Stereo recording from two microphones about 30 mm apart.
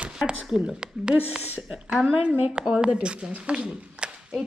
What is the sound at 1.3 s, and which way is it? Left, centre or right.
Speech, right.